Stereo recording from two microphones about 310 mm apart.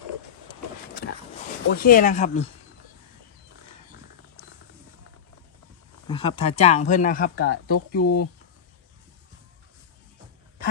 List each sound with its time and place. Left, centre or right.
0.9 s a sound: left
1.7 s speech: left
6.1 s speech: centre
8.0 s speech: left